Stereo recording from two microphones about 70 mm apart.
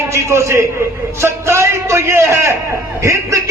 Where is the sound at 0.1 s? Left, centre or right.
Right.